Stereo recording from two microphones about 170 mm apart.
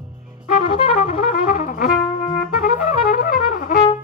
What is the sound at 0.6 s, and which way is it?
Music, 35° left (ahead or behind).